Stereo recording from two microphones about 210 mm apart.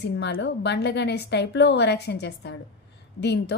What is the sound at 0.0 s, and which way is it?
A woman's voice, 55° left (ahead or behind).